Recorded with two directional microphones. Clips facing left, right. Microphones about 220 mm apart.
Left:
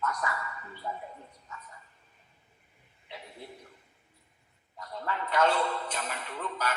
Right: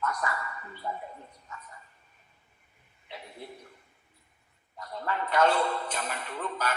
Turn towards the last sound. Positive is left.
turn(degrees=-50)  # may be behind; listen again after turning